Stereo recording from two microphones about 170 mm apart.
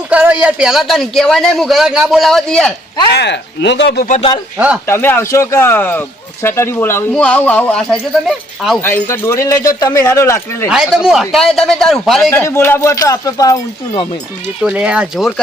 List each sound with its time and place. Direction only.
0.1 s a man's voice: 5° right (ahead or behind)
3.1 s speech: 85° left
4.5 s speech: 10° right (ahead or behind)
4.9 s a man's voice: 15° left (ahead or behind)
8.8 s speech: 10° left (ahead or behind)
10.7 s a man's voice: 5° right (ahead or behind)
12.3 s speech: 15° left (ahead or behind)
14.6 s a man's voice: 5° right (ahead or behind)